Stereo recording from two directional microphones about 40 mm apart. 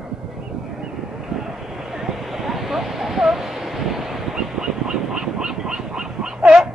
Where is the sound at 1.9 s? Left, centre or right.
Centre.